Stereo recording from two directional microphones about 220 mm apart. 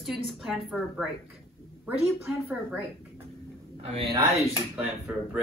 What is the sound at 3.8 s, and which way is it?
Speech, 25° right (ahead or behind).